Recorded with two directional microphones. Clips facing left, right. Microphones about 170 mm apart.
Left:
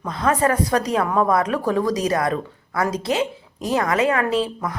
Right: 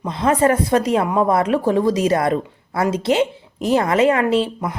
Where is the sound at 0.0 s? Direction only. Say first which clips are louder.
Right 3 dB; 25° right (ahead or behind).